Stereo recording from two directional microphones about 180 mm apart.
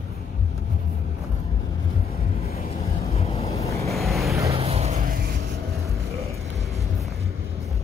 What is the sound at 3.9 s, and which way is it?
Vehicle, centre (ahead or behind).